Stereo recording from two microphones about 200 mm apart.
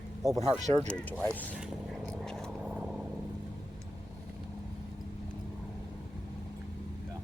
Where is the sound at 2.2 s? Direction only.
5° left (ahead or behind).